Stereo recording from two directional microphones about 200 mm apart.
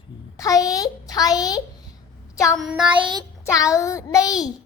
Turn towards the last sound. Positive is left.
turn(degrees=15)  # may be behind; listen again after turning